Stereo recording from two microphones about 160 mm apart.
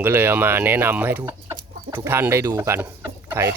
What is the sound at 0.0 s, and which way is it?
Speech, 15° right (ahead or behind).